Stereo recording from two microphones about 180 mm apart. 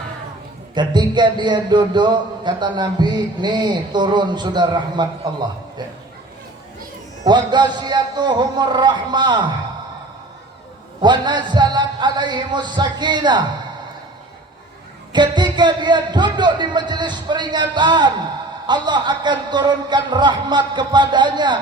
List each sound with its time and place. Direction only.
0.7 s speech: 25° right (ahead or behind)
7.3 s speech: 25° right (ahead or behind)
11.0 s speech: 25° right (ahead or behind)
15.1 s speech: 25° right (ahead or behind)